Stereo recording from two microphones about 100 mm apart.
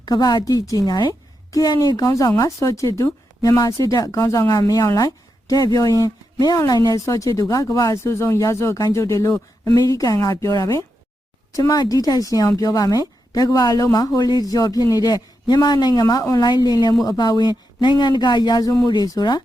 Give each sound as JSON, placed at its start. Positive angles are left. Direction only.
{"t": 0.0, "sound": "speech", "side_deg": 45}